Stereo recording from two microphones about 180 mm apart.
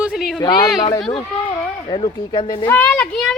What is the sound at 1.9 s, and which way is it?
Speech, 25° left (ahead or behind).